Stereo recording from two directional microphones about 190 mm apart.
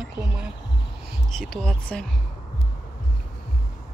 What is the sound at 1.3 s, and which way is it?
Speech, 5° left (ahead or behind).